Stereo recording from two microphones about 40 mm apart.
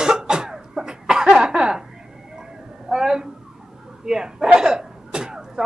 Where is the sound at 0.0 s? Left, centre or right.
Centre.